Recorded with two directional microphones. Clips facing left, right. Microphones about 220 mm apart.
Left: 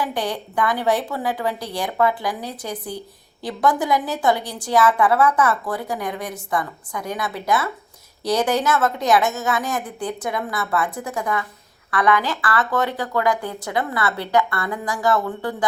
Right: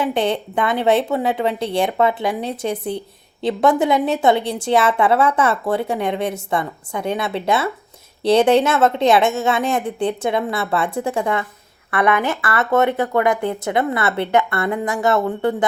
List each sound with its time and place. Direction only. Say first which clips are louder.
0.0 s a woman's voice: right 6 dB; 25° right (ahead or behind)